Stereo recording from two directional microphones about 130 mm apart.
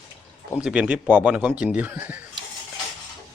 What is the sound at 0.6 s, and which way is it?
Speech, 10° right (ahead or behind).